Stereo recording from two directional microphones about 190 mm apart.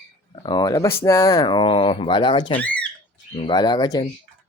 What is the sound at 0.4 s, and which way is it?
Speech, 20° left (ahead or behind).